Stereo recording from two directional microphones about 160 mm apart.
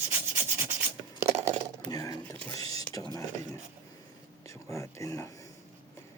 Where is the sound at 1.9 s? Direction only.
20° left (ahead or behind).